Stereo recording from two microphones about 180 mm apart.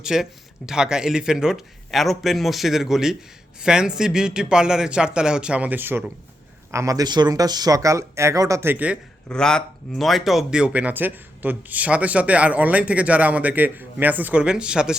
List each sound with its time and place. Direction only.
0.0 s speech: 5° right (ahead or behind)
9.3 s speech: 5° left (ahead or behind)